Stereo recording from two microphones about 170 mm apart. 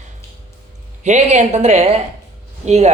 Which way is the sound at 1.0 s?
45° right (ahead or behind).